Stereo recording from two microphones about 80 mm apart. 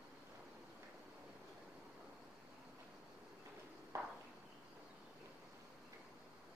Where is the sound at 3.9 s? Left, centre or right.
Right.